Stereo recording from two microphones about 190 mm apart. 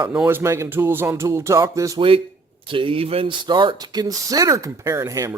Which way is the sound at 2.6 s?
25° right (ahead or behind).